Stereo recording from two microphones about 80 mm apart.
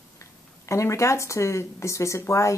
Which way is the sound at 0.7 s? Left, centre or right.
Left.